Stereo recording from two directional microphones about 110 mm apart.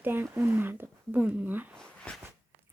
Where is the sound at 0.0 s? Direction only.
20° right (ahead or behind).